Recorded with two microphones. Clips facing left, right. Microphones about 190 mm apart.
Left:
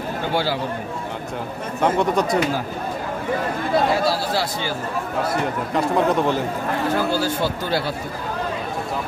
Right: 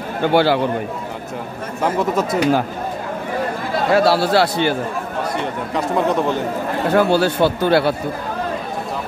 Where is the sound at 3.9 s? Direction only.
65° right (ahead or behind).